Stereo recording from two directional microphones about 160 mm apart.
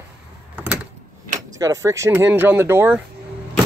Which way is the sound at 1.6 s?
20° right (ahead or behind).